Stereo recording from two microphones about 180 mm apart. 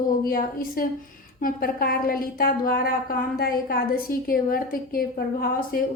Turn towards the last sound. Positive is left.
turn(degrees=55)  # may be behind; listen again after turning